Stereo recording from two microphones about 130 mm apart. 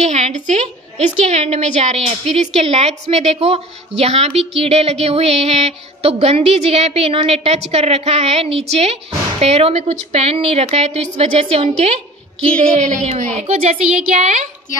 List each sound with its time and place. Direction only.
0.0 s a woman's voice: 60° right (ahead or behind)